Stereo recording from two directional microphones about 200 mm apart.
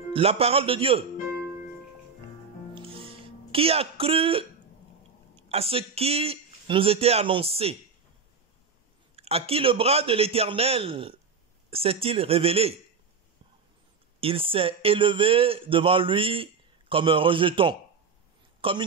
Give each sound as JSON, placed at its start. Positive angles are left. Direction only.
{"t": 0.1, "sound": "speech", "side_deg": -30}
{"t": 2.7, "sound": "music", "side_deg": -25}
{"t": 5.3, "sound": "speech", "side_deg": -30}
{"t": 9.1, "sound": "speech", "side_deg": -30}
{"t": 14.2, "sound": "a woman's voice", "side_deg": -25}